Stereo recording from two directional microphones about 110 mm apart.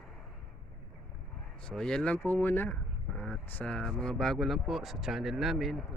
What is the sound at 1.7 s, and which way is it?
Speech, 5° left (ahead or behind).